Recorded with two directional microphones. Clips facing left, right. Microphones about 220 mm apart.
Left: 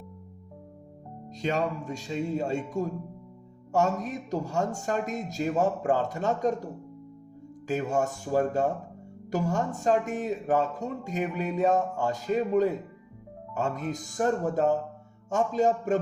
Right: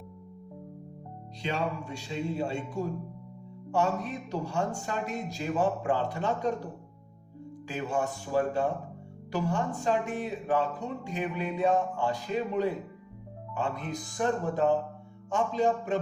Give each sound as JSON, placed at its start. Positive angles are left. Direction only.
{"t": 1.4, "sound": "speech", "side_deg": 45}
{"t": 7.7, "sound": "speech", "side_deg": 45}